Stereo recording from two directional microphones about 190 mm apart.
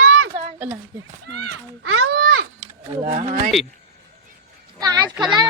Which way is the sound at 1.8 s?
90° right.